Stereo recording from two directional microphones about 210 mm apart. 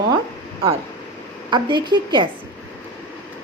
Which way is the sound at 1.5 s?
20° right (ahead or behind).